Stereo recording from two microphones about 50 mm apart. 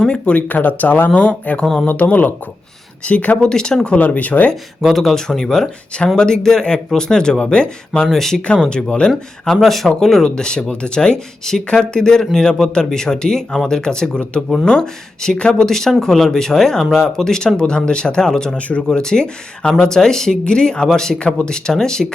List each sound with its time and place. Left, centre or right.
0.0 s speech: left
1.6 s speech: centre
1.9 s speech: left
3.4 s speech: centre
3.9 s speech: left
4.8 s speech: centre
8.0 s speech: centre
8.6 s speech: centre
9.6 s speech: centre
10.2 s speech: centre